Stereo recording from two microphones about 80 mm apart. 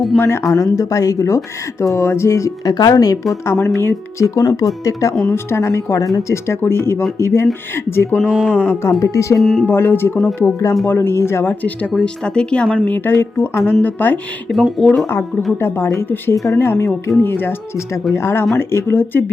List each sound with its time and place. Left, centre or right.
0.2 s speech: left
0.5 s speech: left
2.7 s speech: left
3.4 s speech: left
5.3 s speech: left
8.2 s speech: centre
8.5 s speech: left
9.4 s speech: centre
9.6 s speech: left
11.9 s speech: centre
14.5 s speech: centre
15.0 s speech: left
17.2 s speech: left